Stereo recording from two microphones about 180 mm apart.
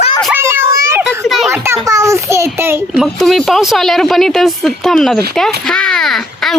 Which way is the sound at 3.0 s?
Centre (ahead or behind).